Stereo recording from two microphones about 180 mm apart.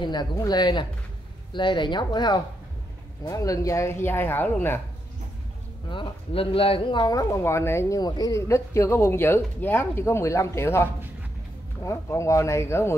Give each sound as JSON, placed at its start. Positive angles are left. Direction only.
{"t": 0.0, "sound": "speech", "side_deg": 25}
{"t": 5.9, "sound": "speech", "side_deg": 25}